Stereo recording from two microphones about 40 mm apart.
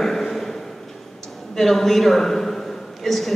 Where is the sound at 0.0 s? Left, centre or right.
Centre.